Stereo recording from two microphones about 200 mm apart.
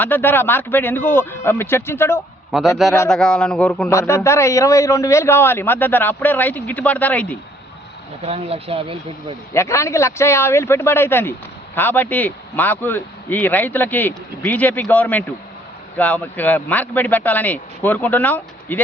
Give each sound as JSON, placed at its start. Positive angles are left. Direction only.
{"t": 0.0, "sound": "speech", "side_deg": 10}
{"t": 2.5, "sound": "a man's voice", "side_deg": 0}
{"t": 8.2, "sound": "speech", "side_deg": -30}
{"t": 9.5, "sound": "speech", "side_deg": 15}